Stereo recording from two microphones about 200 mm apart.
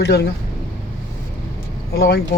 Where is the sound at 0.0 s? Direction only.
55° left (ahead or behind).